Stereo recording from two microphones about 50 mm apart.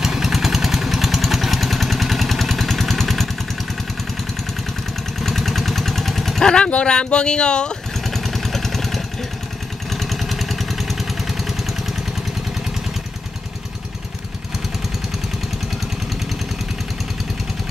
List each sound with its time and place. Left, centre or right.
0.0 s vehicle: centre
5.2 s vehicle: centre
6.4 s speech: centre
8.1 s vehicle: centre